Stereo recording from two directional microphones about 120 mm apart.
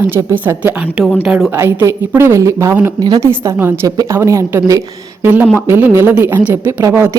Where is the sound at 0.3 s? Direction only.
15° right (ahead or behind).